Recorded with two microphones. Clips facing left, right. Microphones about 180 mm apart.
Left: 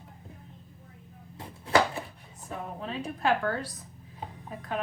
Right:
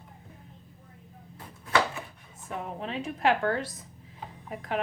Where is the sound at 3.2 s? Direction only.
25° right (ahead or behind).